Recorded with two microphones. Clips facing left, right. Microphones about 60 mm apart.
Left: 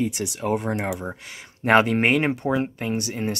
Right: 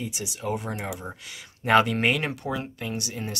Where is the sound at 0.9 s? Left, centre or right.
Left.